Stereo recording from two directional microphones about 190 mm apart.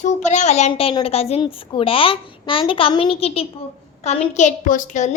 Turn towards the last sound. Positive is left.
turn(degrees=40)  # may be behind; listen again after turning